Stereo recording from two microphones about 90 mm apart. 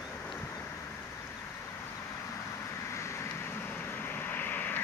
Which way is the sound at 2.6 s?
30° left (ahead or behind).